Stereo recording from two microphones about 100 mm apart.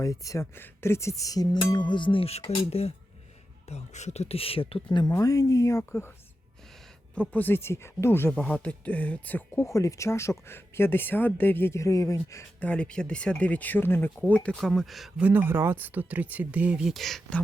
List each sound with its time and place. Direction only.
0.0 s speech: 35° left (ahead or behind)
1.6 s a sound: 50° left (ahead or behind)
2.6 s speech: 90° left; by 4.8 s 70° left (ahead or behind)
4.9 s speech: 40° left (ahead or behind)
7.2 s speech: 20° left (ahead or behind)
8.3 s speech: 10° left (ahead or behind)
9.6 s speech: 30° left (ahead or behind)
12.5 s speech: 10° left (ahead or behind)
14.6 s speech: centre (ahead or behind)
15.2 s speech: 20° right (ahead or behind); by 17.4 s 5° left (ahead or behind)